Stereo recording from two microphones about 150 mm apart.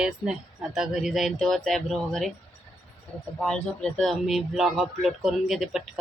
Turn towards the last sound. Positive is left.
turn(degrees=0)  # may be behind; listen again after turning